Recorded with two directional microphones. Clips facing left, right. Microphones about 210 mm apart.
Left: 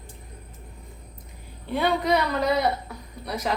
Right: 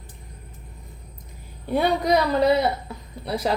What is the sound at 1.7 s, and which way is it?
A woman's voice, 40° right (ahead or behind).